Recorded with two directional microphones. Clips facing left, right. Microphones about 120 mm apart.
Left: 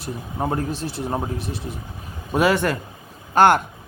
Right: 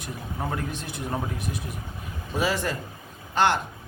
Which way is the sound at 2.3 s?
65° left (ahead or behind).